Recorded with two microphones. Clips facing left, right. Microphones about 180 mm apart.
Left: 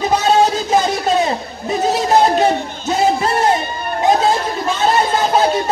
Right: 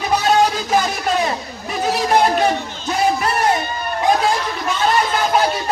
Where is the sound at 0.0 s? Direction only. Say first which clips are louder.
Left 2 dB; 25° left (ahead or behind).